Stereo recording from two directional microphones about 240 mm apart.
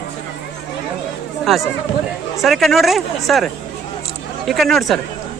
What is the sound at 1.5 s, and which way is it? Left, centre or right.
Speech, centre.